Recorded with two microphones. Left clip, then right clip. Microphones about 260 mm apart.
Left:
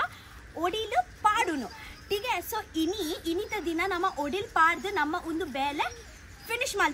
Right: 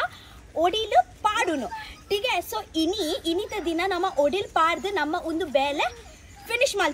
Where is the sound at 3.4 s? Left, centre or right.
Centre.